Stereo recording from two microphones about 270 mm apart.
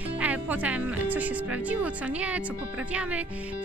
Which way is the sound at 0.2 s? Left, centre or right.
Centre.